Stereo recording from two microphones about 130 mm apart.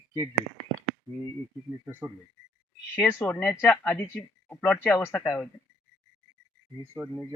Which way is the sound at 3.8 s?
15° left (ahead or behind).